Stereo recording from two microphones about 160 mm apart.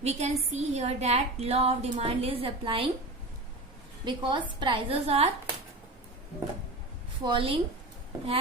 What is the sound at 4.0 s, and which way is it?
A woman's voice, 30° right (ahead or behind).